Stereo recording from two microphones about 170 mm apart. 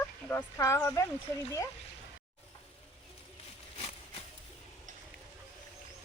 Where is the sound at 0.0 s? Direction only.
10° left (ahead or behind).